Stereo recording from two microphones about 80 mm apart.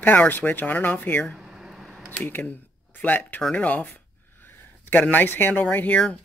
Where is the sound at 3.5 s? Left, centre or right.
Centre.